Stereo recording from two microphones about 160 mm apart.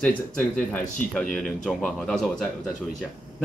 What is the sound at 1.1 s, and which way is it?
Speech, centre (ahead or behind).